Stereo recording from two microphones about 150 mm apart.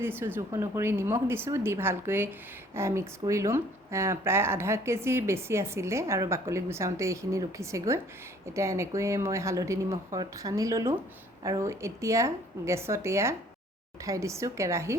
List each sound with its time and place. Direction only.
0.0 s speech: 15° right (ahead or behind)